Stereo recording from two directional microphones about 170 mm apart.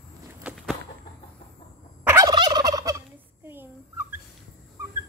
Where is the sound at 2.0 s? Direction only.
20° right (ahead or behind).